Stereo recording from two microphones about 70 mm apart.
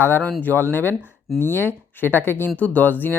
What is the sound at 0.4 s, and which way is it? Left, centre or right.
Speech, left.